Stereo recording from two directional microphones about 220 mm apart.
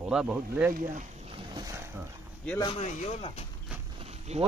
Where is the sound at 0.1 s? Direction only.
5° right (ahead or behind).